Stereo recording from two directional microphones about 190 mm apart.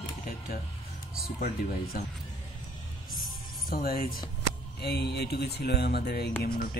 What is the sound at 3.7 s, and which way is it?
Speech, 50° left (ahead or behind).